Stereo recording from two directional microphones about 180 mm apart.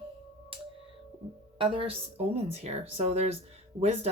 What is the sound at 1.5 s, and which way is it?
Speech, 30° right (ahead or behind).